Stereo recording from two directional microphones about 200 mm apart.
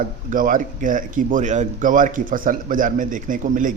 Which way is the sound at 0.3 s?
40° right (ahead or behind).